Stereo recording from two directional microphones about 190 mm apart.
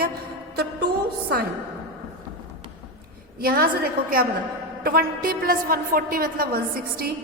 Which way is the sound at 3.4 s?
50° right (ahead or behind).